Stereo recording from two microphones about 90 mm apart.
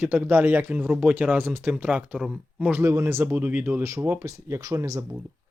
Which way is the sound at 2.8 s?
30° right (ahead or behind).